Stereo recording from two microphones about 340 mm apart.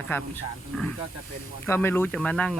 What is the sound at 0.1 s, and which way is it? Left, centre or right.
Speech, centre.